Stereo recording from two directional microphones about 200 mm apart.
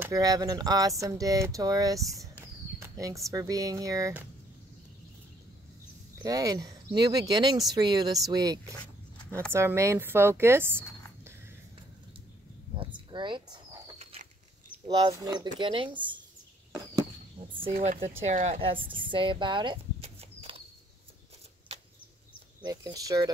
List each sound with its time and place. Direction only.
0.0 s speech: 15° right (ahead or behind)
6.2 s speech: 20° right (ahead or behind)
12.7 s a sound: 25° right (ahead or behind)
14.9 s speech: 20° right (ahead or behind)
17.7 s speech: 40° right (ahead or behind)
21.7 s a sound: 30° right (ahead or behind)
22.6 s speech: 20° right (ahead or behind)